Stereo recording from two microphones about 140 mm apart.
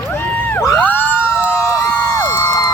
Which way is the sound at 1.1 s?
5° right (ahead or behind).